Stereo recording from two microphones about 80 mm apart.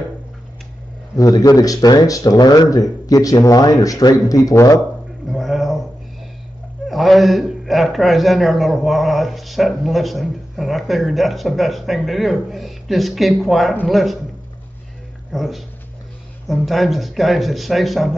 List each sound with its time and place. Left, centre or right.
1.1 s speech: left
5.3 s a sound: centre
6.9 s a man's voice: centre
15.3 s a man's voice: centre
16.6 s a man's voice: centre